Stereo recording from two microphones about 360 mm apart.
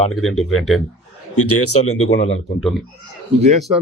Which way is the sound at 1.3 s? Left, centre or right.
Left.